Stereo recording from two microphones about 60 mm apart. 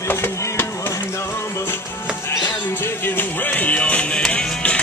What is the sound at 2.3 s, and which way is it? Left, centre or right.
Music, left.